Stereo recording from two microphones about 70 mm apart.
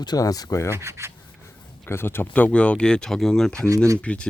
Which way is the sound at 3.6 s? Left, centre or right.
Right.